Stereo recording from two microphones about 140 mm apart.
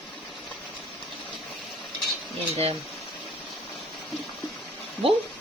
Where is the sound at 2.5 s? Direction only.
45° right (ahead or behind).